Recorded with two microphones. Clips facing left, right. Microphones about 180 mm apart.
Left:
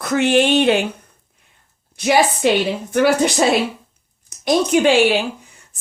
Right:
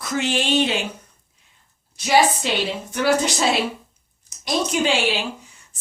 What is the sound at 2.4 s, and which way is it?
Speech, 55° left (ahead or behind).